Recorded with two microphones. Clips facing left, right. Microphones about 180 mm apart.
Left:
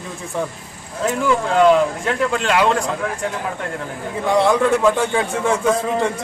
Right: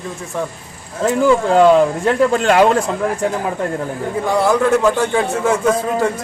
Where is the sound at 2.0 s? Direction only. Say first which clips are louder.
Right 6 dB; 40° right (ahead or behind).